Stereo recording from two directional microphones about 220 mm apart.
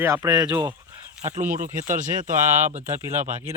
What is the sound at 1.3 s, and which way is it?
Speech, 35° right (ahead or behind).